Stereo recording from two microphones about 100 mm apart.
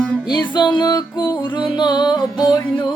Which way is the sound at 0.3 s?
50° left (ahead or behind).